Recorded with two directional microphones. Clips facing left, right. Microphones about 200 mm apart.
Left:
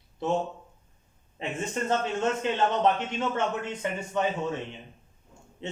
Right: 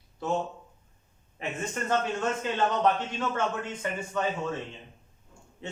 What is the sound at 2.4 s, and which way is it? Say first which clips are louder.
A man's voice: even; 20° left (ahead or behind).